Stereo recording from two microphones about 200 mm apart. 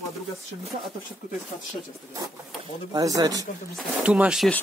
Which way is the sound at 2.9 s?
15° right (ahead or behind).